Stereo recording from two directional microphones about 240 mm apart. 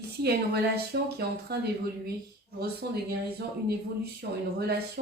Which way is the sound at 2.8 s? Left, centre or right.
Right.